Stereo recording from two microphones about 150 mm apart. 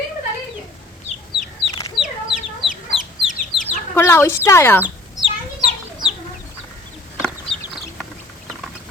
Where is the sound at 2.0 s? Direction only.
30° left (ahead or behind).